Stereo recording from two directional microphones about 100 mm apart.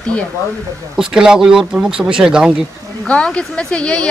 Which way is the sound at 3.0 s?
10° left (ahead or behind).